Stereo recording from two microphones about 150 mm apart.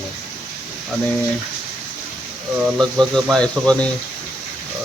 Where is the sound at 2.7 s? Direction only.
Centre (ahead or behind).